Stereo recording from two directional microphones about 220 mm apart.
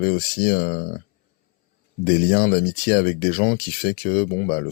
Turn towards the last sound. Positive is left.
turn(degrees=40)  # may be behind; listen again after turning